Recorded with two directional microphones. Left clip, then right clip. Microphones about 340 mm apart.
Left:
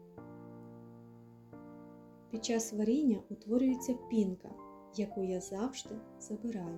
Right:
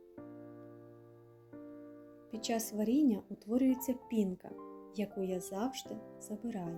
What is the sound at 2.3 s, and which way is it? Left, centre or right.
Speech, right.